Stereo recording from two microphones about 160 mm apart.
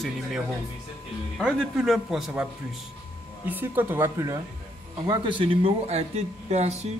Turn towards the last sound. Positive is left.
turn(degrees=-45)  # may be behind; listen again after turning